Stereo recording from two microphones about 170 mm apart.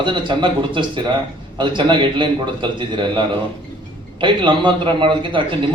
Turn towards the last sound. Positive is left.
turn(degrees=-30)  # may be behind; listen again after turning